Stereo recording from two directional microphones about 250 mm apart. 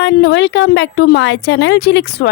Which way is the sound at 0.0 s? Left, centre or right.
Left.